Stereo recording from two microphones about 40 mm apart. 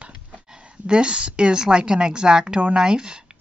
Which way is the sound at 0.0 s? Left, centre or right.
Right.